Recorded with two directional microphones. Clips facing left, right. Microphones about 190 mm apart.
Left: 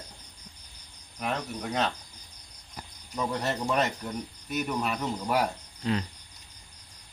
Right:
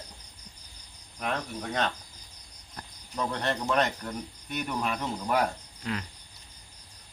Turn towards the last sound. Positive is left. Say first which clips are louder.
# left 5 dB
turn(degrees=25)  # may be behind; listen again after turning